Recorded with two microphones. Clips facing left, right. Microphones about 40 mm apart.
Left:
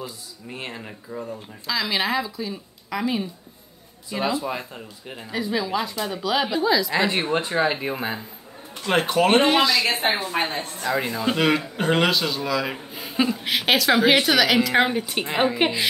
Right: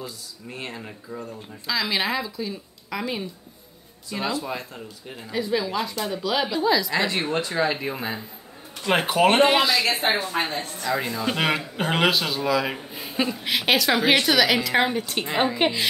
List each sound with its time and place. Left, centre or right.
0.5 s a man's voice: centre
4.1 s speech: centre
5.3 s a man's voice: centre
7.1 s speech: left
8.8 s speech: centre
9.8 s a woman's voice: left
10.2 s a woman's voice: centre
10.9 s speech: centre
11.3 s a man's voice: centre